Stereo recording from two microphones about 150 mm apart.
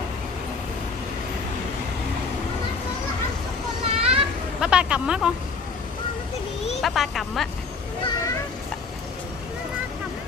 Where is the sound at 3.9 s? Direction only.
40° right (ahead or behind).